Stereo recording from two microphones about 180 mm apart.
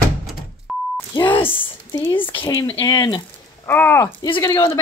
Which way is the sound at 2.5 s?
20° left (ahead or behind).